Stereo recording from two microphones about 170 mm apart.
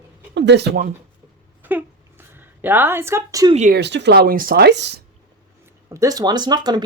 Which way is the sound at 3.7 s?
90° right.